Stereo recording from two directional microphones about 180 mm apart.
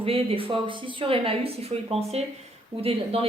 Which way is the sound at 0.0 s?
30° right (ahead or behind).